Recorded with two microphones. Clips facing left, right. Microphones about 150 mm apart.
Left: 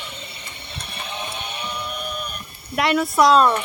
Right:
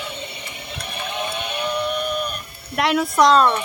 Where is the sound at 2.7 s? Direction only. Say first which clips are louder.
Even; centre (ahead or behind).